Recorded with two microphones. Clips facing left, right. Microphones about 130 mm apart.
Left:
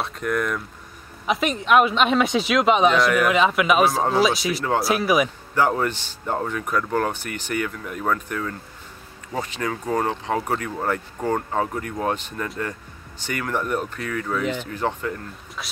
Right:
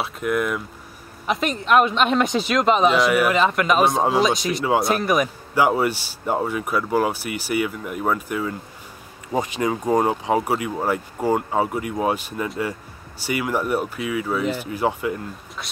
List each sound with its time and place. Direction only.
0.0 s speech: 5° right (ahead or behind)
5.5 s speech: 10° right (ahead or behind)
15.6 s speech: centre (ahead or behind)